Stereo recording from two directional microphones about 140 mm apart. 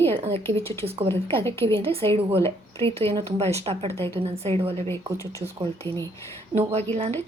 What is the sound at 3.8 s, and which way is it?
Speech, 20° left (ahead or behind).